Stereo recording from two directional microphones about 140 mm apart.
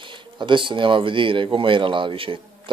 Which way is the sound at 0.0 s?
35° right (ahead or behind).